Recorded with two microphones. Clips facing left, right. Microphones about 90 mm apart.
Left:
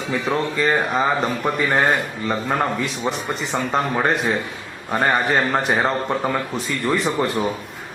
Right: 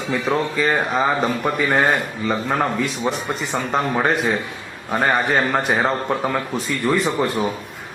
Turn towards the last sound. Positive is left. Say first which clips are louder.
# right 1 dB
turn(degrees=0)  # may be behind; listen again after turning